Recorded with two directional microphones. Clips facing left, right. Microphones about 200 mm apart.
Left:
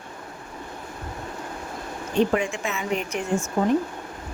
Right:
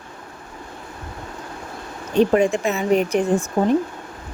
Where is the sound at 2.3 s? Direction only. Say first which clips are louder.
Right 7 dB; 40° right (ahead or behind).